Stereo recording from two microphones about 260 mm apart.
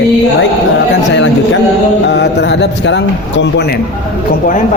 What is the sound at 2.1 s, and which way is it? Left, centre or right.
A man's voice, left.